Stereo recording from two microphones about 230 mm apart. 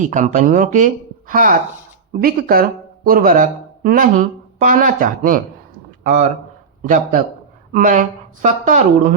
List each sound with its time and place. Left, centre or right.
0.0 s speech: right